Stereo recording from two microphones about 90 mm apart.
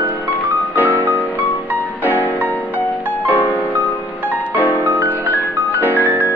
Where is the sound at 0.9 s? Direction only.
20° left (ahead or behind).